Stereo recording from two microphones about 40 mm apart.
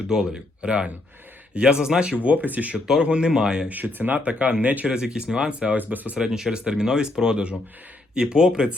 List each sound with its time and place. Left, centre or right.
0.1 s speech: centre
2.1 s speech: right
2.7 s speech: centre
3.7 s speech: right
4.2 s speech: right
4.6 s speech: right
4.9 s speech: right
5.7 s speech: right
6.1 s speech: centre